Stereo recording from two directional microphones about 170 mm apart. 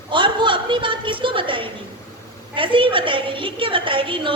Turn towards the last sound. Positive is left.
turn(degrees=-30)  # may be behind; listen again after turning